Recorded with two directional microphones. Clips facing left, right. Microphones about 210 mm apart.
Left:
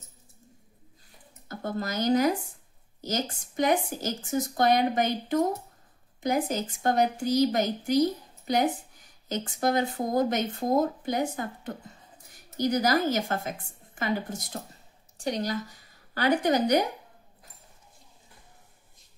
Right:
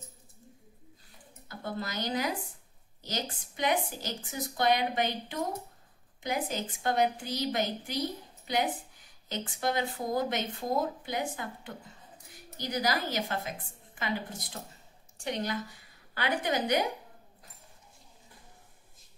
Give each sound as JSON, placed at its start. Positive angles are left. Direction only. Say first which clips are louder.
{"t": 1.5, "sound": "a woman's voice", "louder": "left 5 dB", "side_deg": 45}